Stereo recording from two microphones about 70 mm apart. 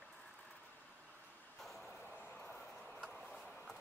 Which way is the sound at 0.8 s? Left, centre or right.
Right.